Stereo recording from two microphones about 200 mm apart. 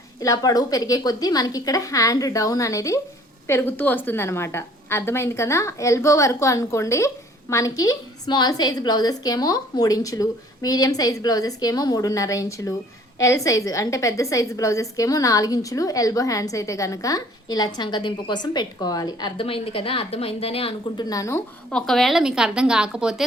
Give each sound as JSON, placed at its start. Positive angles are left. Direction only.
{"t": 0.2, "sound": "a woman's voice", "side_deg": 15}
{"t": 21.8, "sound": "a woman's voice", "side_deg": 0}